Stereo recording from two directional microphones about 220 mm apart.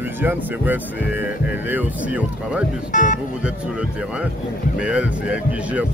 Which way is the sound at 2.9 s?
35° left (ahead or behind).